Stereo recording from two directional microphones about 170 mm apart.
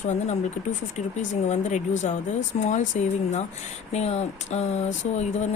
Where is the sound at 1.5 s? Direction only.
45° left (ahead or behind).